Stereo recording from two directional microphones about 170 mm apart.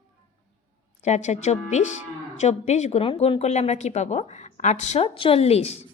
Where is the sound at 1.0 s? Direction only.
40° left (ahead or behind).